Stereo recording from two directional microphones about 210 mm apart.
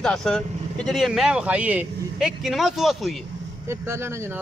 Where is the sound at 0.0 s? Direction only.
5° left (ahead or behind).